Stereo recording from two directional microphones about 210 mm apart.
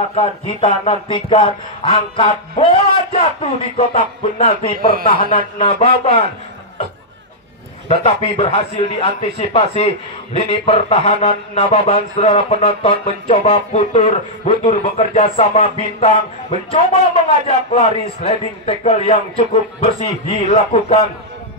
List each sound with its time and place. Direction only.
0.1 s a man's voice: 30° left (ahead or behind)
7.9 s a man's voice: 30° left (ahead or behind)